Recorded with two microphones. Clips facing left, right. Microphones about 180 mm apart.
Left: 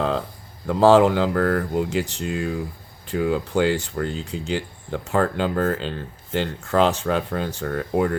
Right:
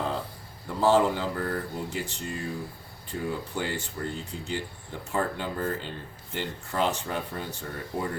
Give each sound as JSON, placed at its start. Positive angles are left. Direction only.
{"t": 0.7, "sound": "speech", "side_deg": 90}